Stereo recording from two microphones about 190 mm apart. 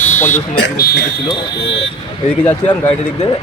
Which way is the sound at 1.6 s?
70° left (ahead or behind).